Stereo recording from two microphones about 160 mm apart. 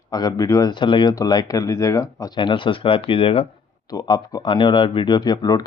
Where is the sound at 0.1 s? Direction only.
25° left (ahead or behind).